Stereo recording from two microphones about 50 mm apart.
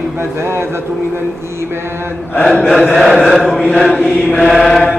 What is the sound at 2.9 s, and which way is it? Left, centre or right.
Chant, centre.